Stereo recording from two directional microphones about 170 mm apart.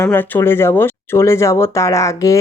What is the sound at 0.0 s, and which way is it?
Speech, 10° left (ahead or behind).